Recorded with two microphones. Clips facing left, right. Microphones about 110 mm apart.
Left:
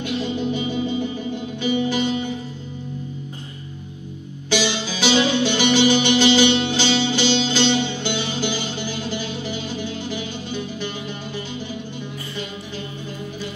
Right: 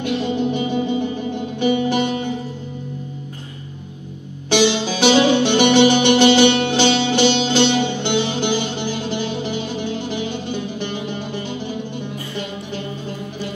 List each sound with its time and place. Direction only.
0.0 s music: 60° right (ahead or behind)
4.5 s music: 60° right (ahead or behind)